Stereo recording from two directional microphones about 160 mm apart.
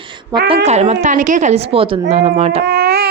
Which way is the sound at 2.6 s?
85° right.